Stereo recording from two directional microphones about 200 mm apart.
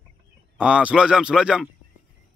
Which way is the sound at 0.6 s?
5° right (ahead or behind).